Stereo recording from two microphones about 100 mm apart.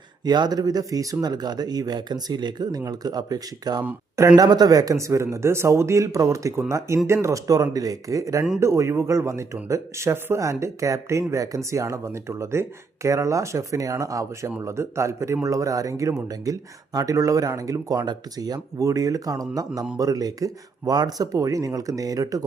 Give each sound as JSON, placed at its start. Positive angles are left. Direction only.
{"t": 0.3, "sound": "speech", "side_deg": -45}